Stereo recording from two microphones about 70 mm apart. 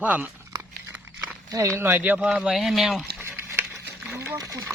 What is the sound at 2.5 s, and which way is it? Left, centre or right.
Speech, centre.